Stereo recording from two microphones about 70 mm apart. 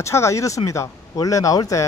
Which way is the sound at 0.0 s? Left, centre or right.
Left.